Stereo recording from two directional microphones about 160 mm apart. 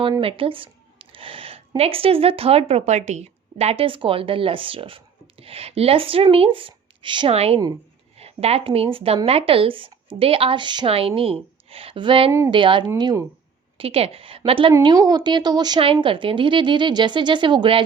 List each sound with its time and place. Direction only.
0.2 s a woman's voice: 35° right (ahead or behind)
13.7 s a woman's voice: 35° right (ahead or behind)
14.7 s a woman's voice: 25° right (ahead or behind)